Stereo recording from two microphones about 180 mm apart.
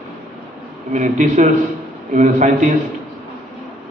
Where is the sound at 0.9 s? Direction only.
45° right (ahead or behind).